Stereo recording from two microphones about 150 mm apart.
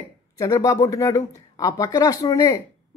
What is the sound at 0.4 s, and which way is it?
Speech, 25° left (ahead or behind).